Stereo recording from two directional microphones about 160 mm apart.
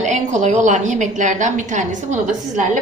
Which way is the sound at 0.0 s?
50° right (ahead or behind).